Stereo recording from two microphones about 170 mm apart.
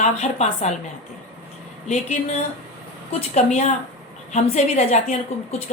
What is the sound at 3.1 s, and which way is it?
A woman's voice, 40° left (ahead or behind).